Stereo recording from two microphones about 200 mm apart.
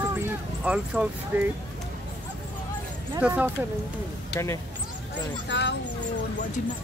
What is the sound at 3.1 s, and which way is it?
Speech, 10° right (ahead or behind).